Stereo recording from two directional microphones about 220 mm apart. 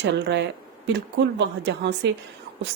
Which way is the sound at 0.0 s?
50° right (ahead or behind).